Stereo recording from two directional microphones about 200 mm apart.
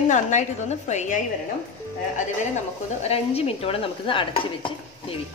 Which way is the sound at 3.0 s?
30° left (ahead or behind).